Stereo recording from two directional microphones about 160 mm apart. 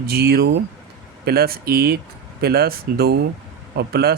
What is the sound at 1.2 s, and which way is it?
Speech, 75° right (ahead or behind).